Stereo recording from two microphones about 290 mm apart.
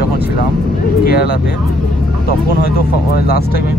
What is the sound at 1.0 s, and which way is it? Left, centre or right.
Speech, left.